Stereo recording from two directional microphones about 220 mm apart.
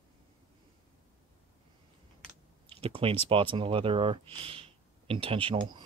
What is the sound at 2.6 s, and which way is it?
Speech, 25° right (ahead or behind).